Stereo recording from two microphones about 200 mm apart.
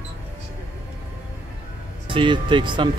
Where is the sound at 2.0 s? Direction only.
25° right (ahead or behind).